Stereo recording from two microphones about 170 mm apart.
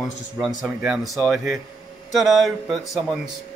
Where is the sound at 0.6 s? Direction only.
5° right (ahead or behind).